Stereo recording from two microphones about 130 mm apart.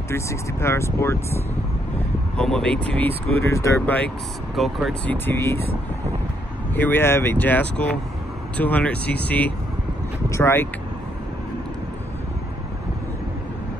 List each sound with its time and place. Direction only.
0.1 s speech: 20° left (ahead or behind)
2.3 s speech: 5° left (ahead or behind)
3.4 s speech: 20° left (ahead or behind)
4.6 s speech: centre (ahead or behind)
5.0 s speech: 15° left (ahead or behind)
6.7 s speech: 15° left (ahead or behind)